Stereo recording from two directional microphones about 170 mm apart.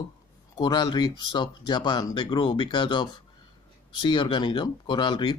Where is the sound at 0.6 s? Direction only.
25° left (ahead or behind).